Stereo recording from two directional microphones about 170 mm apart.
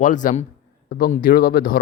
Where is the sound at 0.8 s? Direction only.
60° left (ahead or behind).